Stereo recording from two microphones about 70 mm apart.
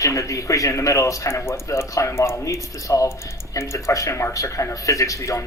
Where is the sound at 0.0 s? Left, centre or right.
Left.